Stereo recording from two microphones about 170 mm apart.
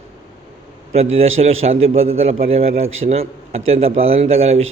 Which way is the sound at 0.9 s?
35° right (ahead or behind).